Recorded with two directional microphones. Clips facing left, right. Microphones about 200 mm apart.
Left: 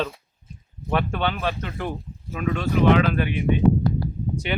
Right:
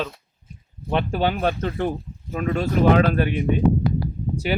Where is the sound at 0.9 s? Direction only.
25° right (ahead or behind).